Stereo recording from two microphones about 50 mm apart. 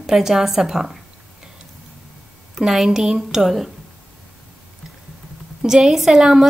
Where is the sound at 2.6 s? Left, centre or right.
Centre.